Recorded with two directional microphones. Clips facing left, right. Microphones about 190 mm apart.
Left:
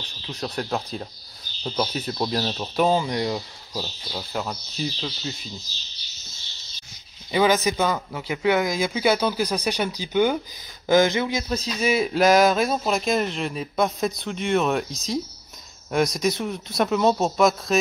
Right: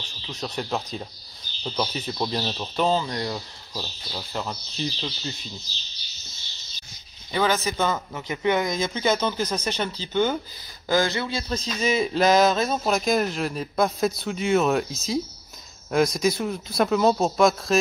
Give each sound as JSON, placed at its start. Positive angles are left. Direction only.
{"t": 0.3, "sound": "speech", "side_deg": 0}
{"t": 3.8, "sound": "speech", "side_deg": 5}
{"t": 7.2, "sound": "speech", "side_deg": 15}